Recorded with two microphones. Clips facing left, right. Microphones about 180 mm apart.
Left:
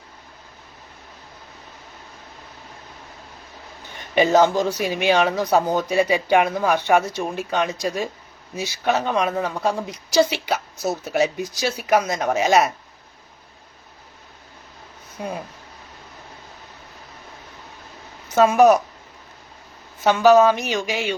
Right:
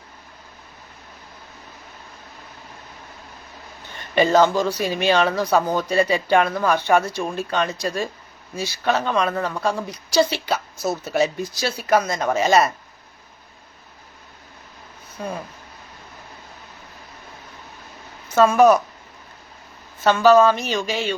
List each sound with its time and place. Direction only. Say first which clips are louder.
3.9 s speech: even; 15° left (ahead or behind)
15.2 s speech: even; 15° left (ahead or behind)
18.3 s speech: even; 15° left (ahead or behind)
20.1 s speech: even; 15° left (ahead or behind)